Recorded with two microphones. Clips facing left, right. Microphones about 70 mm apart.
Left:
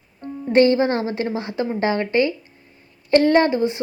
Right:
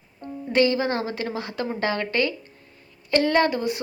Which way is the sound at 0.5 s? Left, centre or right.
Left.